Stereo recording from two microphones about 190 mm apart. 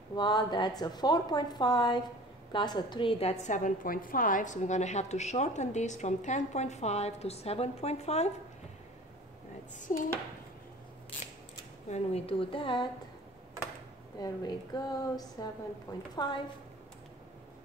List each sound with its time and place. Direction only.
0.1 s a woman's voice: 20° left (ahead or behind)
11.9 s a woman's voice: 30° left (ahead or behind)
14.2 s a woman's voice: 20° left (ahead or behind)